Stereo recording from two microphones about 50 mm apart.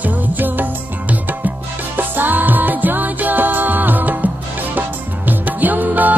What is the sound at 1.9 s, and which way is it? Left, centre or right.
Music, right.